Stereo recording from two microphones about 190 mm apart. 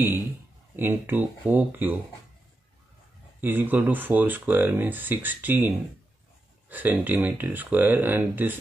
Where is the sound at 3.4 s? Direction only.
10° right (ahead or behind).